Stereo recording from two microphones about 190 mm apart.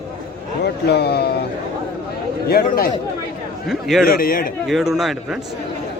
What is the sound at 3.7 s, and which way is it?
Speech, centre (ahead or behind).